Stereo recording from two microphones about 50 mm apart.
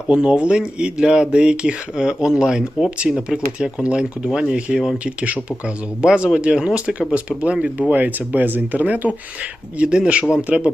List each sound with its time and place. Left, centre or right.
0.1 s speech: right
5.0 s speech: right
7.9 s speech: right
9.7 s speech: centre